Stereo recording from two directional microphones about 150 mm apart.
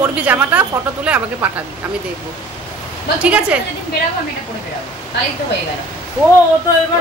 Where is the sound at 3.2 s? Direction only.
10° right (ahead or behind).